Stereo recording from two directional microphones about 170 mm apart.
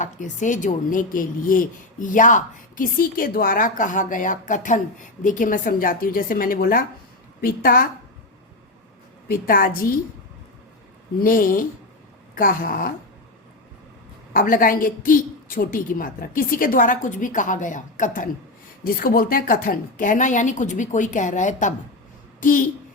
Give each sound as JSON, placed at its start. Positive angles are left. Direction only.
{"t": 0.0, "sound": "a woman's voice", "side_deg": 45}
{"t": 9.3, "sound": "a woman's voice", "side_deg": 55}
{"t": 11.2, "sound": "a woman's voice", "side_deg": 55}
{"t": 14.3, "sound": "speech", "side_deg": 55}